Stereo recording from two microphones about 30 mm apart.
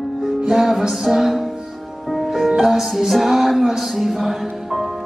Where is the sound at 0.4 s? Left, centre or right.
Centre.